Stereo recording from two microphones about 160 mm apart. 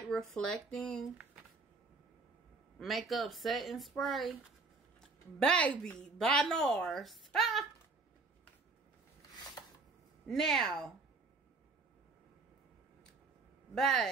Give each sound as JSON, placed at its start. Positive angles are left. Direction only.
{"t": 0.4, "sound": "speech", "side_deg": 5}
{"t": 2.8, "sound": "a woman's voice", "side_deg": 0}
{"t": 10.2, "sound": "a woman's voice", "side_deg": 0}
{"t": 13.7, "sound": "a woman's voice", "side_deg": 0}